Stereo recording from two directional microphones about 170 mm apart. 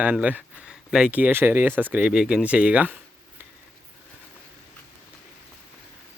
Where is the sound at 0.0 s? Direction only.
10° right (ahead or behind).